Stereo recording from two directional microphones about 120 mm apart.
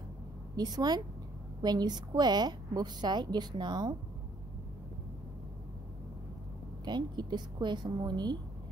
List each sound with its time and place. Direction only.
0.6 s a woman's voice: 35° right (ahead or behind)
6.8 s a woman's voice: 35° right (ahead or behind)